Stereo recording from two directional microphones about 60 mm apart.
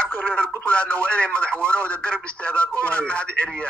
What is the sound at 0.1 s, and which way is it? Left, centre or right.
Radio, left.